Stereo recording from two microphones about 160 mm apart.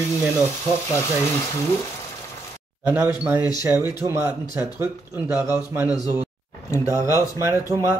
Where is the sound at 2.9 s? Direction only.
10° right (ahead or behind).